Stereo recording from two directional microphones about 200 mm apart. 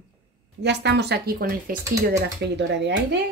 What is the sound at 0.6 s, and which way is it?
A woman's voice, 60° right (ahead or behind).